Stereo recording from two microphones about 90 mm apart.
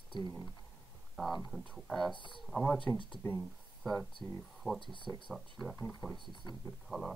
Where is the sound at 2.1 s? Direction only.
65° left (ahead or behind).